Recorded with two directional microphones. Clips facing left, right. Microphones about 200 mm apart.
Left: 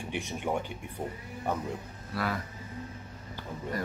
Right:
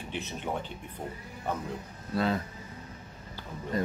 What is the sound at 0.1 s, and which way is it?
Speech, 15° left (ahead or behind).